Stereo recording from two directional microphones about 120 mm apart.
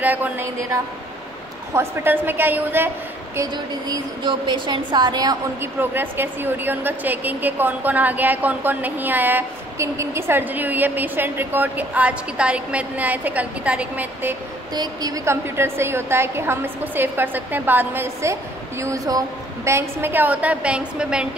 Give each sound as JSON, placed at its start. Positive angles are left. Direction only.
{"t": 0.0, "sound": "a woman's voice", "side_deg": -15}
{"t": 1.7, "sound": "a woman's voice", "side_deg": -20}
{"t": 3.5, "sound": "a woman's voice", "side_deg": -40}
{"t": 5.6, "sound": "a woman's voice", "side_deg": -15}
{"t": 14.7, "sound": "a woman's voice", "side_deg": -35}
{"t": 15.4, "sound": "a woman's voice", "side_deg": -20}